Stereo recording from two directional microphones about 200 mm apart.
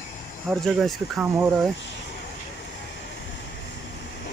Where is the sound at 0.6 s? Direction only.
Centre (ahead or behind).